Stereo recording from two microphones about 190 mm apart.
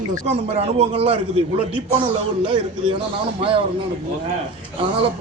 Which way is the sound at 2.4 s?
25° right (ahead or behind).